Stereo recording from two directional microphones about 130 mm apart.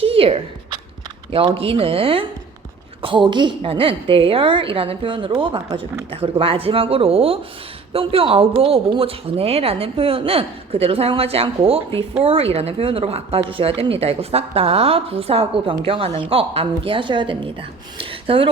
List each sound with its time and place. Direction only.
0.0 s zipper: 45° right (ahead or behind)
1.3 s speech: 45° right (ahead or behind)